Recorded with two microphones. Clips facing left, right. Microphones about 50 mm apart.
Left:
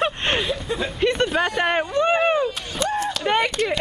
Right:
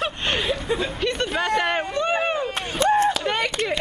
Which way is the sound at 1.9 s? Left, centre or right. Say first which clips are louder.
Left 4 dB; centre.